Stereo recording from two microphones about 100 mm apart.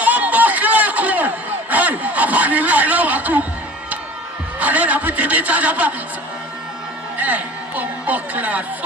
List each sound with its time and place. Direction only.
0.0 s a sound: 15° right (ahead or behind)
4.6 s music: 15° right (ahead or behind)
7.2 s speech: 15° right (ahead or behind)